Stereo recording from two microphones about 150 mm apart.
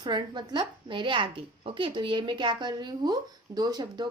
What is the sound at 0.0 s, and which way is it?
A woman's voice, 30° right (ahead or behind).